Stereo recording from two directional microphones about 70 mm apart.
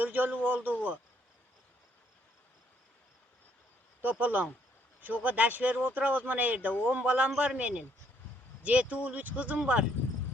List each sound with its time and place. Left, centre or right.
0.0 s speech: right
4.0 s a man's voice: right